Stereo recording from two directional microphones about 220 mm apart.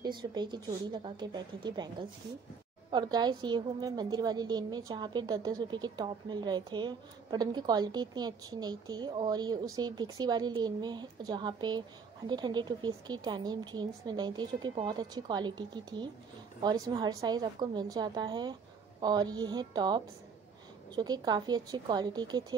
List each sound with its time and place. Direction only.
0.0 s a woman's voice: 20° right (ahead or behind)